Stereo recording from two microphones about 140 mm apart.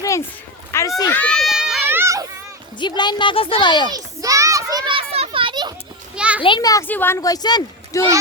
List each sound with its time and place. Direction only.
0.0 s a sound: 20° left (ahead or behind)
0.7 s children playing: 20° left (ahead or behind)
1.1 s children playing: 10° left (ahead or behind)
1.9 s children playing: 20° right (ahead or behind)
2.7 s a woman's voice: 30° left (ahead or behind)
3.8 s children playing: 25° right (ahead or behind)
4.9 s children playing: 45° right (ahead or behind)
6.1 s children playing: 10° right (ahead or behind)
6.4 s speech: 30° left (ahead or behind)
6.8 s speech: 15° left (ahead or behind)